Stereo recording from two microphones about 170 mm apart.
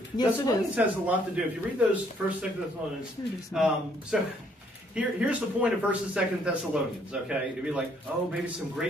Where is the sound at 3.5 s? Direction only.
Centre (ahead or behind).